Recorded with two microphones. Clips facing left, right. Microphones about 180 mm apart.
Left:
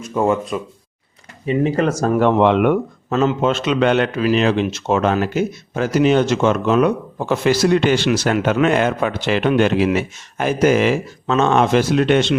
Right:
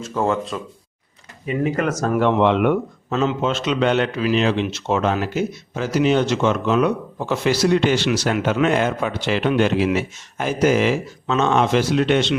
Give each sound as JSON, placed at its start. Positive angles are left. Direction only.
{"t": 0.0, "sound": "speech", "side_deg": 15}
{"t": 1.5, "sound": "speech", "side_deg": 30}
{"t": 2.2, "sound": "a man's voice", "side_deg": 50}